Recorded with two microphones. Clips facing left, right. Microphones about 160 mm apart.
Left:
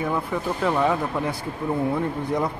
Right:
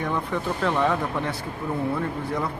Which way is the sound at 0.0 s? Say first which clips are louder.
Left 1 dB; 5° left (ahead or behind).